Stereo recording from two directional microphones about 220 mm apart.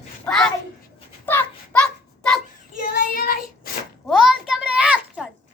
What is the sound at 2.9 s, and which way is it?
Child singing, 40° left (ahead or behind).